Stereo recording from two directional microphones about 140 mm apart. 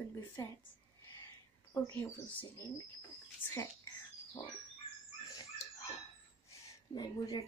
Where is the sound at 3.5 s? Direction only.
20° left (ahead or behind).